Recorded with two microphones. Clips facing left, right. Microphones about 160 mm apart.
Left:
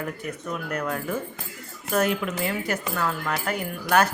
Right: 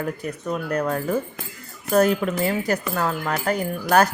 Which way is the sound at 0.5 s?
35° right (ahead or behind).